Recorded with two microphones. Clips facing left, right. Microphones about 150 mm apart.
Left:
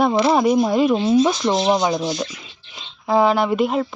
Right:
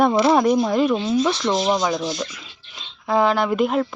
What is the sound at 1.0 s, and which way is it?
Speech, 25° left (ahead or behind).